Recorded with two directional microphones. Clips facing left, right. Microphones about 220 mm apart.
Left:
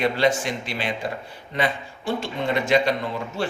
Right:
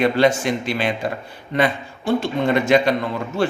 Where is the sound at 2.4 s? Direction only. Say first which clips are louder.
Right 3 dB; 55° right (ahead or behind).